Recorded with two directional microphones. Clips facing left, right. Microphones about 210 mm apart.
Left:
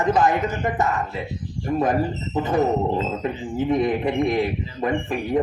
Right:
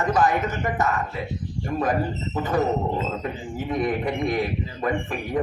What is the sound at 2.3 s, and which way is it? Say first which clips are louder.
A man's voice: left 3 dB; 25° left (ahead or behind).